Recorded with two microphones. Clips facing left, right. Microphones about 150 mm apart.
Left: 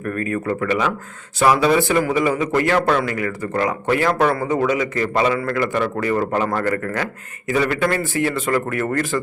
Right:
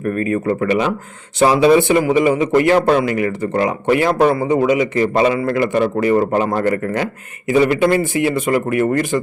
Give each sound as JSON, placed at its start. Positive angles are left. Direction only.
{"t": 0.0, "sound": "speech", "side_deg": -20}